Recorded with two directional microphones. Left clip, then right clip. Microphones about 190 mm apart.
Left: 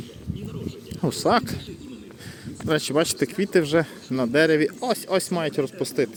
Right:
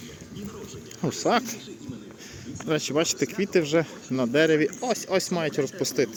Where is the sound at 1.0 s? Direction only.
25° left (ahead or behind).